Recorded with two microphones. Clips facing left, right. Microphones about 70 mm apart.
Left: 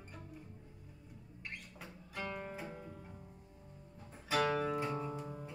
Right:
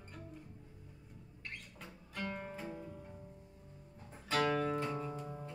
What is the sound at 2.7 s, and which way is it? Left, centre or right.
Music, left.